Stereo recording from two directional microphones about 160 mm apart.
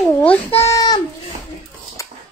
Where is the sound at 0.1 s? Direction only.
10° left (ahead or behind).